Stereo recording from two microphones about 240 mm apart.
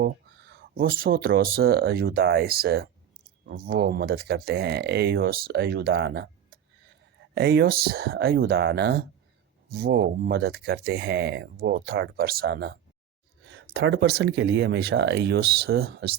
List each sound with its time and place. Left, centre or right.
0.8 s speech: right
7.3 s speech: right